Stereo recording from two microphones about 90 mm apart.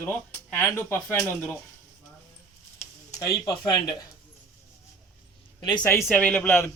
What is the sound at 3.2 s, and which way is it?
Speech, 40° left (ahead or behind).